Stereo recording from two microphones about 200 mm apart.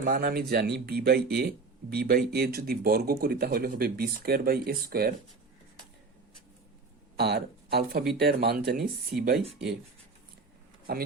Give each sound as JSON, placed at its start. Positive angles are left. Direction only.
{"t": 0.0, "sound": "speech", "side_deg": -50}
{"t": 7.2, "sound": "speech", "side_deg": -55}
{"t": 9.5, "sound": "speech", "side_deg": 0}
{"t": 10.9, "sound": "speech", "side_deg": -55}